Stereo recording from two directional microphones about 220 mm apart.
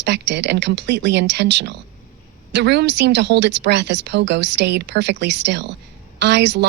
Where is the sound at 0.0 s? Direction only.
50° right (ahead or behind).